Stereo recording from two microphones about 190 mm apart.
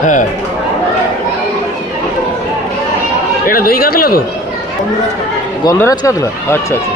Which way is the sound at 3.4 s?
50° left (ahead or behind).